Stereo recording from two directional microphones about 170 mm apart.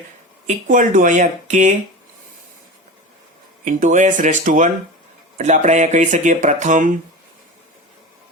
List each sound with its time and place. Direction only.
0.4 s speech: 50° right (ahead or behind)
3.6 s speech: 50° right (ahead or behind)